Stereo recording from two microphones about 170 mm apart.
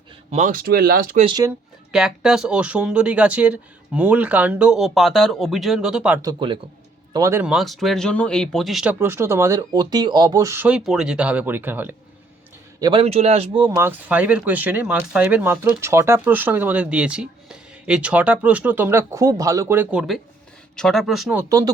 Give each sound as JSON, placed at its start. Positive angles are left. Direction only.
{"t": 0.3, "sound": "speech", "side_deg": -45}
{"t": 1.2, "sound": "speech", "side_deg": -30}
{"t": 1.9, "sound": "speech", "side_deg": -5}
{"t": 6.2, "sound": "speech", "side_deg": -30}
{"t": 7.1, "sound": "speech", "side_deg": -20}
{"t": 7.4, "sound": "speech", "side_deg": 0}
{"t": 12.8, "sound": "a man's voice", "side_deg": -30}
{"t": 13.6, "sound": "speech", "side_deg": -15}
{"t": 21.3, "sound": "speech", "side_deg": -20}